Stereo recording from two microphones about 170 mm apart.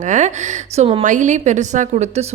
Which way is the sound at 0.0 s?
45° right (ahead or behind).